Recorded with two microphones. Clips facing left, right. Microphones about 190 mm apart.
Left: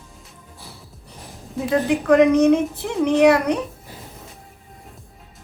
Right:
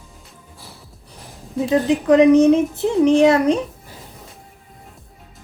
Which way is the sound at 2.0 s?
20° right (ahead or behind).